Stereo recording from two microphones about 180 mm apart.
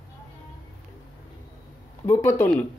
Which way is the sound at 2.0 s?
15° left (ahead or behind).